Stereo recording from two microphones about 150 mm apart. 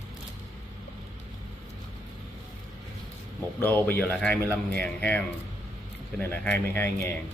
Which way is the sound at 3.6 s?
10° left (ahead or behind).